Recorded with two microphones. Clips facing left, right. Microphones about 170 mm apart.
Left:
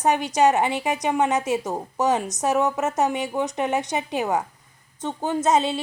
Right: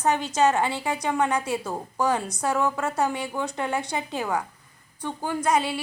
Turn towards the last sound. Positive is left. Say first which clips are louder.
# left 3 dB
turn(degrees=25)  # may be behind; listen again after turning